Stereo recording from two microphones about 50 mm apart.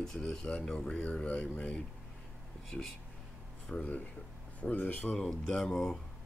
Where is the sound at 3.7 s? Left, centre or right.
Left.